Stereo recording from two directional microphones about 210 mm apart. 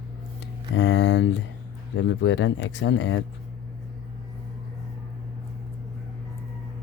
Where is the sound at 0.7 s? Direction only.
60° left (ahead or behind).